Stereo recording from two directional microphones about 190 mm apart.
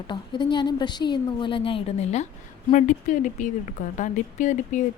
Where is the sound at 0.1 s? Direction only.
25° left (ahead or behind).